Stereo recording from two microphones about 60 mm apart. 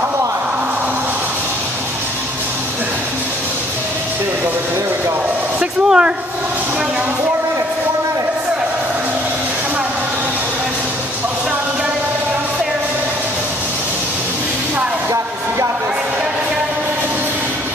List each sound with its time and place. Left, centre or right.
5.6 s speech: centre